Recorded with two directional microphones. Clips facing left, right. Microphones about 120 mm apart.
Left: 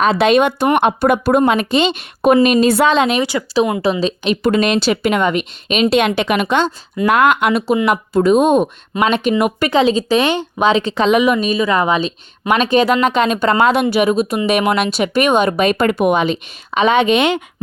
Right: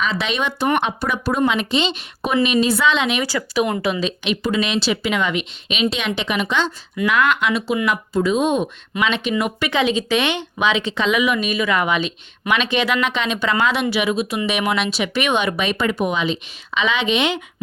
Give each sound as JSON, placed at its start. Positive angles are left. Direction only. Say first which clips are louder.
{"t": 0.0, "sound": "a woman's voice", "louder": "left 10 dB", "side_deg": 50}
{"t": 3.2, "sound": "speech", "louder": "left 5 dB", "side_deg": 25}
{"t": 4.0, "sound": "a woman's voice", "louder": "left 5 dB", "side_deg": 40}
{"t": 4.4, "sound": "speech", "louder": "left 6 dB", "side_deg": 50}
{"t": 9.7, "sound": "a woman's voice", "louder": "left 5 dB", "side_deg": 35}